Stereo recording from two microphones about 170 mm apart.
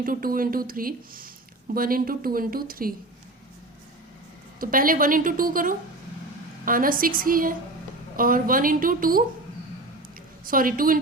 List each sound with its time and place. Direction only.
0.0 s speech: 55° right (ahead or behind)
4.6 s speech: 55° right (ahead or behind)
10.4 s speech: 55° right (ahead or behind)